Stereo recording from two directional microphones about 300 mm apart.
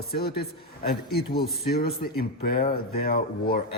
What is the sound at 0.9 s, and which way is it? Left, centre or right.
Speech, left.